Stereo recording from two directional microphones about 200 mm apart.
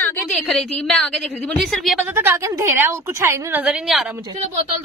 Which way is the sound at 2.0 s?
10° right (ahead or behind).